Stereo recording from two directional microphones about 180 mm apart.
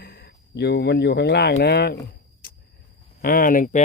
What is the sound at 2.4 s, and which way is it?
Vehicle, 55° left (ahead or behind).